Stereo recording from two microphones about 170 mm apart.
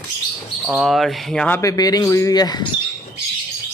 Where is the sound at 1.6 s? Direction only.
20° left (ahead or behind).